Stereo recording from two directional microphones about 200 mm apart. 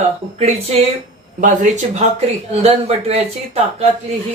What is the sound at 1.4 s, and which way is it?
Speech, 35° right (ahead or behind).